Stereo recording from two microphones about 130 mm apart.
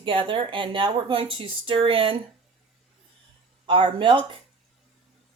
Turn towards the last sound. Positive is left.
turn(degrees=-40)  # may be behind; listen again after turning